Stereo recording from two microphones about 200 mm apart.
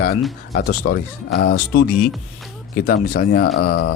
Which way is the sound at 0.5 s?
50° left (ahead or behind).